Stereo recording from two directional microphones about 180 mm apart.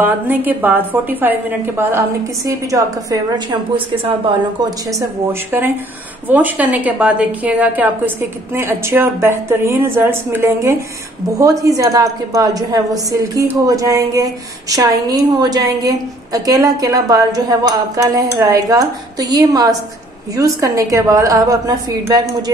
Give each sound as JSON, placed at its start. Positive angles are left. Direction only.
{"t": 0.0, "sound": "a woman's voice", "side_deg": -10}
{"t": 3.7, "sound": "a woman's voice", "side_deg": -30}
{"t": 6.2, "sound": "a woman's voice", "side_deg": -10}